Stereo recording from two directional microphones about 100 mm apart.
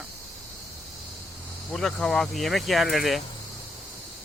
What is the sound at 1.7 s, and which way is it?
Speech, 5° left (ahead or behind).